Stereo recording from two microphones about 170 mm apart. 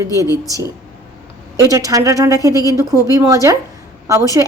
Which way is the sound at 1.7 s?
20° right (ahead or behind).